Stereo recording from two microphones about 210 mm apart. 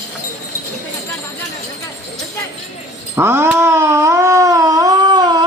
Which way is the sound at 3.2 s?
10° right (ahead or behind).